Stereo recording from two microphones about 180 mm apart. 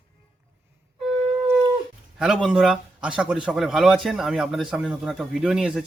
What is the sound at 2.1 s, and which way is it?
Speech, 5° right (ahead or behind).